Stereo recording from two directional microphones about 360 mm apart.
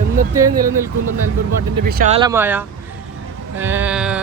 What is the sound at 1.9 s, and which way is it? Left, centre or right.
A man's voice, right.